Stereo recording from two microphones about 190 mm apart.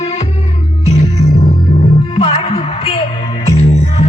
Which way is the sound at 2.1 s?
30° left (ahead or behind).